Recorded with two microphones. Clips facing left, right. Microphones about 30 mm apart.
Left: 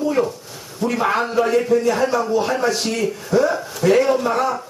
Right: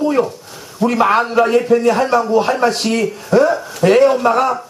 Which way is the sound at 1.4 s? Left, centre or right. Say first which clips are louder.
Right 2 dB; right.